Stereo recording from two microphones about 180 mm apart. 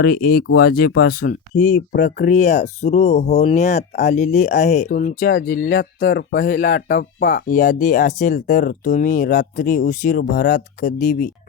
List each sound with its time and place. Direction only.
0.0 s speech: 55° left (ahead or behind)
2.0 s speech: 65° left (ahead or behind)
2.2 s speech: 40° left (ahead or behind)
4.9 s speech: 50° left (ahead or behind)